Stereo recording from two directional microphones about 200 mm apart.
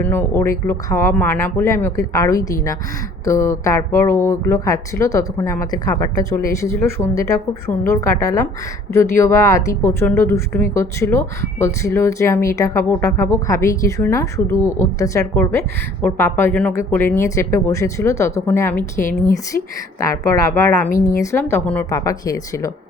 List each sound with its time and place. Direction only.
0.0 s a woman's voice: 10° left (ahead or behind)